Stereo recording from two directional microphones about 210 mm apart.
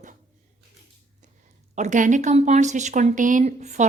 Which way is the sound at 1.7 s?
35° right (ahead or behind).